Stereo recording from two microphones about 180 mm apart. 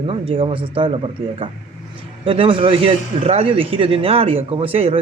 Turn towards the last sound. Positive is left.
turn(degrees=-30)  # may be behind; listen again after turning